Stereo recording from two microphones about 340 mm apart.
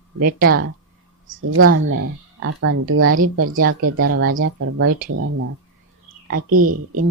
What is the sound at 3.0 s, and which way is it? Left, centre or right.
Speech, right.